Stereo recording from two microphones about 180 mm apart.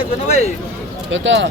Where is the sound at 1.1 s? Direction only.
90° right.